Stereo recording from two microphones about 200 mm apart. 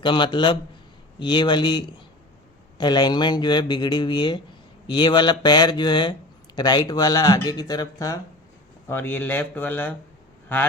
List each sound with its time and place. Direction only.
0.0 s speech: 25° left (ahead or behind)